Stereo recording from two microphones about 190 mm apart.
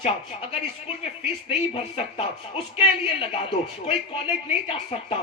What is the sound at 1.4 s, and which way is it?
A woman's voice, 30° left (ahead or behind).